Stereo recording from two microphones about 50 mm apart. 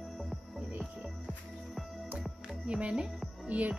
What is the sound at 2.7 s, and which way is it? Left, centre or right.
Speech, centre.